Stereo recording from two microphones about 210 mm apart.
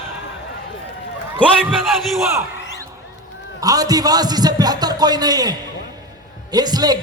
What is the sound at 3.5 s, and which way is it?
A man's voice, 15° right (ahead or behind).